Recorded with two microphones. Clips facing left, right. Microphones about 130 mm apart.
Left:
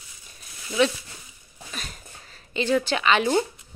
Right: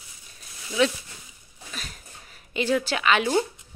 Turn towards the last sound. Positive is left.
turn(degrees=-5)  # may be behind; listen again after turning